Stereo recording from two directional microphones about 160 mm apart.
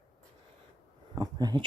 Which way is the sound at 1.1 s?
25° right (ahead or behind).